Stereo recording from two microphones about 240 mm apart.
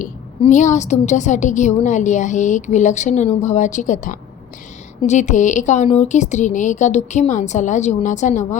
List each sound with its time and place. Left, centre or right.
0.0 s a woman's voice: left